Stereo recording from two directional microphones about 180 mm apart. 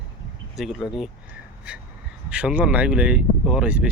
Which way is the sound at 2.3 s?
5° right (ahead or behind).